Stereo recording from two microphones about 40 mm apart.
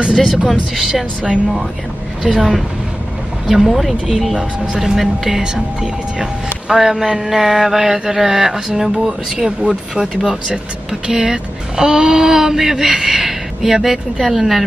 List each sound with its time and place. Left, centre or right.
0.1 s speech: centre